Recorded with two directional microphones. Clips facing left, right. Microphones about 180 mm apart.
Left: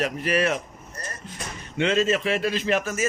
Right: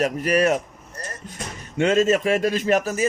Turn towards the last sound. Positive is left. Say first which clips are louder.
# right 4 dB
turn(degrees=-40)  # may be behind; listen again after turning